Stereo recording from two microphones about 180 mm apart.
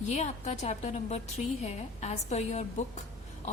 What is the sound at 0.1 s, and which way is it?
A woman's voice, 40° left (ahead or behind).